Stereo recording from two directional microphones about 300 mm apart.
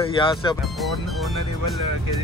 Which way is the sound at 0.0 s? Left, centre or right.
Centre.